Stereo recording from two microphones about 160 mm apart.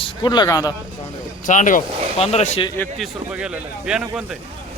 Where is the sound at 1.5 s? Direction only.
55° left (ahead or behind).